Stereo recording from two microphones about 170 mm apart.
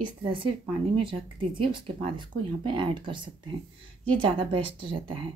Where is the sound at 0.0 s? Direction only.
30° right (ahead or behind).